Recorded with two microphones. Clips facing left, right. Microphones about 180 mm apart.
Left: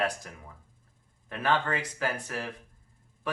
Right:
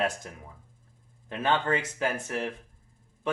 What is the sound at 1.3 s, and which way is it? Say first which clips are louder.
Speech: right 2 dB; 25° right (ahead or behind).